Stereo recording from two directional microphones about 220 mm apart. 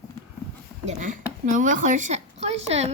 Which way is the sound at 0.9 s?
35° right (ahead or behind).